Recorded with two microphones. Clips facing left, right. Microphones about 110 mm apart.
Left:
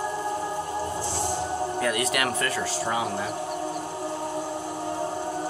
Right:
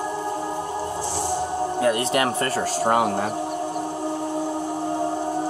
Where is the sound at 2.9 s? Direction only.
55° right (ahead or behind).